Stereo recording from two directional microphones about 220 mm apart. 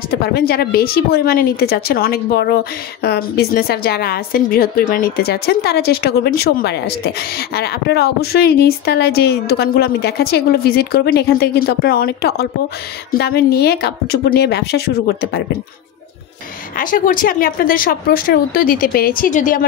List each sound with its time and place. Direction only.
0.2 s a woman's voice: 45° left (ahead or behind)
16.7 s speech: 40° left (ahead or behind)